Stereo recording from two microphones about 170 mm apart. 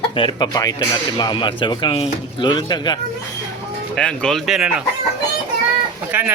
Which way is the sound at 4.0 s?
5° left (ahead or behind).